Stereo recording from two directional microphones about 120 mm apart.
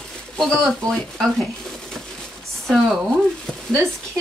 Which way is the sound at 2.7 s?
5° right (ahead or behind).